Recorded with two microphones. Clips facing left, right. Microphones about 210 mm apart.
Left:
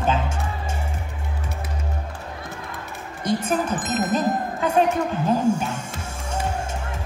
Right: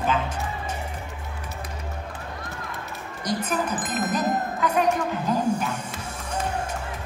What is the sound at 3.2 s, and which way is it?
Speech, 25° left (ahead or behind).